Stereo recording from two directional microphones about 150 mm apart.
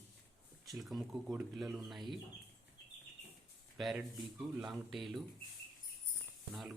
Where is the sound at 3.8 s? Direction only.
Centre (ahead or behind).